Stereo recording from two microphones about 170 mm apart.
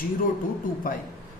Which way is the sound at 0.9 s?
55° left (ahead or behind).